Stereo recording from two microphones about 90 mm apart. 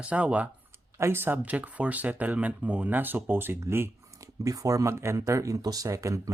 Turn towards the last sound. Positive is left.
turn(degrees=-35)  # may be behind; listen again after turning